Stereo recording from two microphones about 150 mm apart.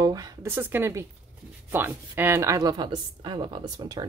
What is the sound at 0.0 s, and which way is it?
Speech, 25° right (ahead or behind).